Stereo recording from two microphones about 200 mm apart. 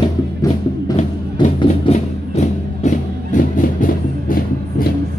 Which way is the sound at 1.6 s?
30° left (ahead or behind).